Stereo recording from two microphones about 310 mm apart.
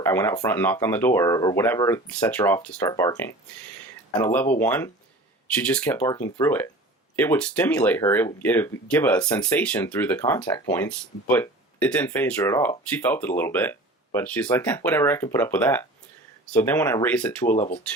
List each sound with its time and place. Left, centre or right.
0.0 s speech: centre
17.5 s speech: left